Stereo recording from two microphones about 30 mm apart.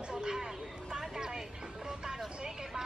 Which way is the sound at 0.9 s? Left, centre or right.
Right.